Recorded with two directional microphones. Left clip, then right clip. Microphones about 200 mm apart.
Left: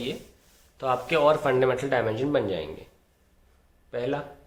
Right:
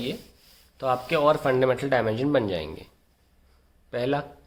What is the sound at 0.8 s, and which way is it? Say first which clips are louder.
A man's voice: even; 25° right (ahead or behind).